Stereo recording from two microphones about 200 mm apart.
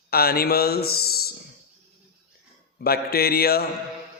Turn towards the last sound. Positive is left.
turn(degrees=50)  # may be behind; listen again after turning